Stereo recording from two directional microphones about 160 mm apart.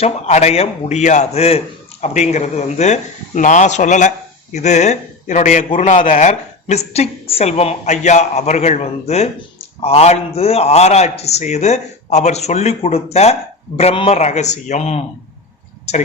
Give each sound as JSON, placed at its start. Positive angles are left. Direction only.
{"t": 0.0, "sound": "a man's voice", "side_deg": 45}